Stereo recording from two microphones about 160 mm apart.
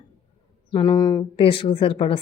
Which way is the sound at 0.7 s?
30° left (ahead or behind).